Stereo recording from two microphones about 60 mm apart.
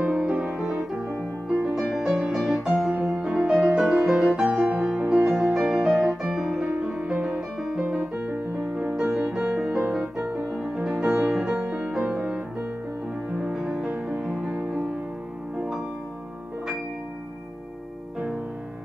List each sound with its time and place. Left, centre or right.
0.0 s music: centre
0.6 s music: centre
8.0 s music: right
8.9 s music: centre
13.3 s music: centre